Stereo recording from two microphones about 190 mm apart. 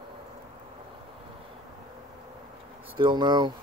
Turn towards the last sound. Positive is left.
turn(degrees=-20)  # may be behind; listen again after turning